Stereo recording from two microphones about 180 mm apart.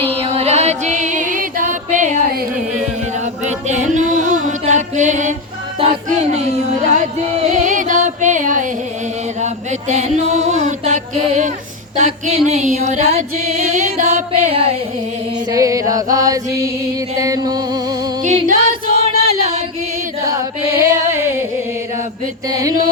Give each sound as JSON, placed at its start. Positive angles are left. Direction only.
{"t": 0.0, "sound": "music", "side_deg": -35}
{"t": 3.4, "sound": "music", "side_deg": -40}
{"t": 9.9, "sound": "music", "side_deg": -40}
{"t": 15.5, "sound": "chant", "side_deg": -20}
{"t": 17.2, "sound": "music", "side_deg": -20}
{"t": 18.2, "sound": "music", "side_deg": -45}
{"t": 18.9, "sound": "female singing", "side_deg": -35}
{"t": 20.2, "sound": "music", "side_deg": -15}
{"t": 22.4, "sound": "chant", "side_deg": -20}